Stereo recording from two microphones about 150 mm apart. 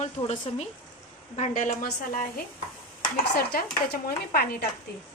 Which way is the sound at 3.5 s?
85° left.